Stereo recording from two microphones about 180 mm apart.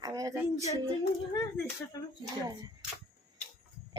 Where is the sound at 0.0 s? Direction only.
20° right (ahead or behind).